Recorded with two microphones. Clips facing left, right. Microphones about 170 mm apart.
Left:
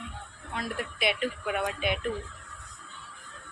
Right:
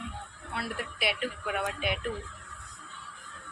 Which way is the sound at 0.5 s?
5° right (ahead or behind).